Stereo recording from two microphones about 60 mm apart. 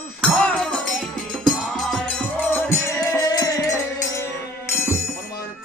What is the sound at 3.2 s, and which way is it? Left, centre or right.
Music, left.